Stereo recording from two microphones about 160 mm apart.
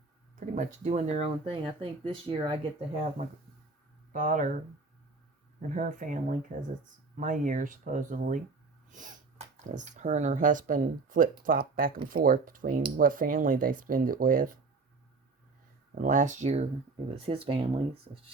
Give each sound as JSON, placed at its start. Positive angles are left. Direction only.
{"t": 0.3, "sound": "speech", "side_deg": -50}
{"t": 2.9, "sound": "speech", "side_deg": -45}
{"t": 4.1, "sound": "speech", "side_deg": -55}
{"t": 5.7, "sound": "speech", "side_deg": -55}
{"t": 8.9, "sound": "sneeze", "side_deg": -55}
{"t": 9.7, "sound": "speech", "side_deg": -50}
{"t": 16.0, "sound": "speech", "side_deg": -55}